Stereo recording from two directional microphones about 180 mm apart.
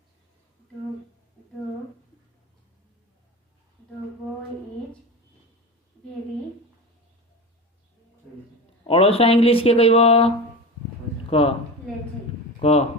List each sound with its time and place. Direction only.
8.9 s speech: 30° left (ahead or behind)
12.5 s speech: 35° left (ahead or behind)